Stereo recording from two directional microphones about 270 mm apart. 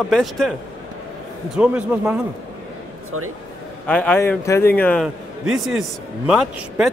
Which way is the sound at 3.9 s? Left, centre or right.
Centre.